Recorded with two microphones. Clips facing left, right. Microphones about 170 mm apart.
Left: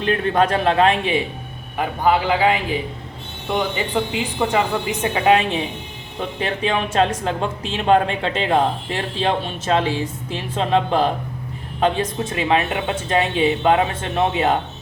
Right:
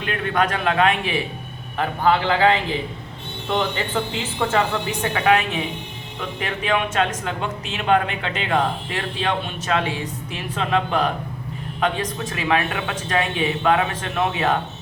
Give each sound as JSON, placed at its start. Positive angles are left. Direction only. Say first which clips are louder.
{"t": 0.0, "sound": "speech", "louder": "left 4 dB", "side_deg": 30}
{"t": 1.8, "sound": "a woman's voice", "louder": "left 1 dB", "side_deg": 10}